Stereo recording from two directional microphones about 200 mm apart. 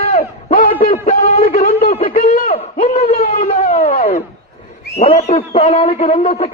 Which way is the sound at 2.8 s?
30° left (ahead or behind).